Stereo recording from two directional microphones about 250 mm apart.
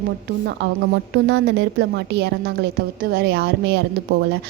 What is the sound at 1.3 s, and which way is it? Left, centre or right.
A woman's voice, right.